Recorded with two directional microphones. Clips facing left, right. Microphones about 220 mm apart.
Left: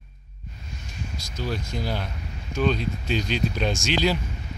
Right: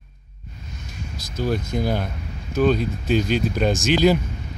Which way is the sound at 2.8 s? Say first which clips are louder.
Right 6 dB; 45° right (ahead or behind).